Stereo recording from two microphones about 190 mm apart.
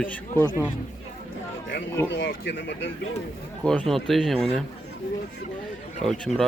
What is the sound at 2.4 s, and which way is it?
Speech, 65° left (ahead or behind).